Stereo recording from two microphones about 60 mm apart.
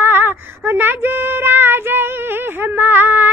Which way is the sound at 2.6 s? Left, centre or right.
Right.